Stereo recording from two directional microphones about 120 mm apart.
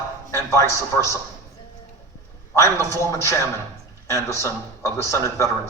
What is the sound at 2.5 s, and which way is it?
A man's voice, 25° left (ahead or behind).